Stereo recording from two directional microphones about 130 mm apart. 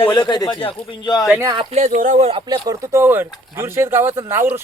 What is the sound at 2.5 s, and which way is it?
Speech, 25° right (ahead or behind).